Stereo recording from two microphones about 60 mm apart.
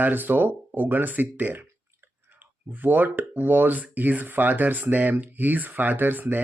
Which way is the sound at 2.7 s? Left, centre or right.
Right.